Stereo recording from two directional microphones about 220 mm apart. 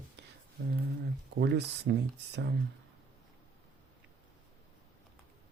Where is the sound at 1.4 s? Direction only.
50° right (ahead or behind).